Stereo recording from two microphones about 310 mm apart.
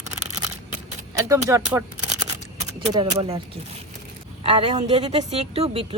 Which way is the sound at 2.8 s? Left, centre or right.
Centre.